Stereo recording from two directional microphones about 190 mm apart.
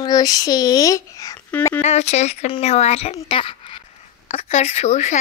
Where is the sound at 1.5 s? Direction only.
10° left (ahead or behind).